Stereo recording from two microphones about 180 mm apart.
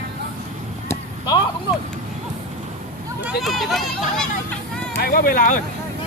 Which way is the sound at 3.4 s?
Centre (ahead or behind).